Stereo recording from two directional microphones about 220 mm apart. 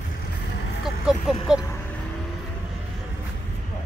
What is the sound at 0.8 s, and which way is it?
Speech, 5° right (ahead or behind).